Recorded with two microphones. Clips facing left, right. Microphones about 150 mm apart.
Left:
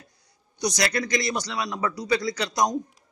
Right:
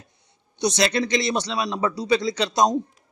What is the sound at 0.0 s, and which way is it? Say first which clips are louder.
A man's voice: right 1 dB; 25° right (ahead or behind).